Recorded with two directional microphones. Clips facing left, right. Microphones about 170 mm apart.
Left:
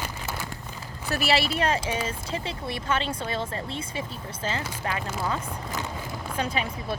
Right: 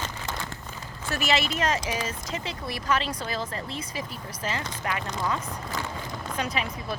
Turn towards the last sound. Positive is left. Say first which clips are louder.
# left 1 dB
turn(degrees=30)  # may be behind; listen again after turning